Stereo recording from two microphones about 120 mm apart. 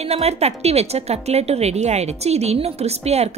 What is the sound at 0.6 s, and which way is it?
A woman's voice, 60° right (ahead or behind).